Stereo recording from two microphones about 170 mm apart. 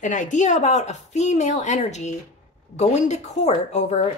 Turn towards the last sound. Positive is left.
turn(degrees=40)  # may be behind; listen again after turning